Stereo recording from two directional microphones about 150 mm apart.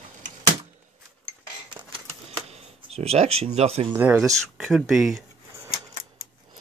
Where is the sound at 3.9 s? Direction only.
15° right (ahead or behind).